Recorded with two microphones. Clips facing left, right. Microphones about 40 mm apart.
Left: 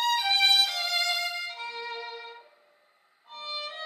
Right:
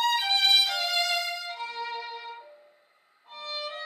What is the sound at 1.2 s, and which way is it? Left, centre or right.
Violin, left.